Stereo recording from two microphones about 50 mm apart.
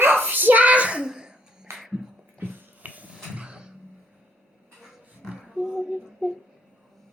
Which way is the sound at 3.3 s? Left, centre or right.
Right.